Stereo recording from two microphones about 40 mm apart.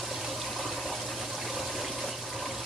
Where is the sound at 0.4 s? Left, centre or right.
Centre.